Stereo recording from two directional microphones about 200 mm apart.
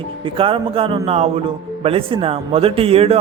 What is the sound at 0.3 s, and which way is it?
Speech, 25° right (ahead or behind).